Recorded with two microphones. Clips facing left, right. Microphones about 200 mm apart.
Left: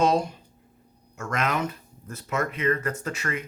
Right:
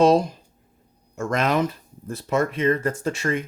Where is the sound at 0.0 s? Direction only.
35° right (ahead or behind).